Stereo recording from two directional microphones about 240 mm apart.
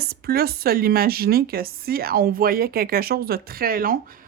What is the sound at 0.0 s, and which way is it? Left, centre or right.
Speech, right.